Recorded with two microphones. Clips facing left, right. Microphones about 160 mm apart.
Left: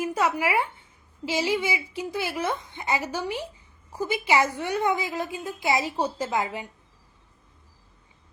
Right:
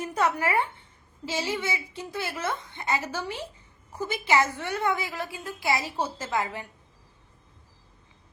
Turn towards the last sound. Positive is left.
turn(degrees=15)  # may be behind; listen again after turning